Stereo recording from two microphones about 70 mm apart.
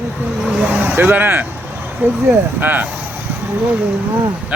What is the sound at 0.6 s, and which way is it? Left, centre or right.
Vehicle, centre.